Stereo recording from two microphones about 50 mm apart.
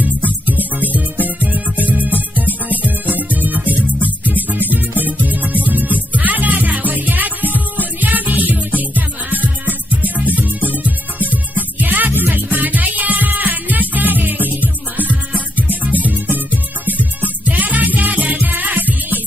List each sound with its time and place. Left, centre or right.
0.5 s music: right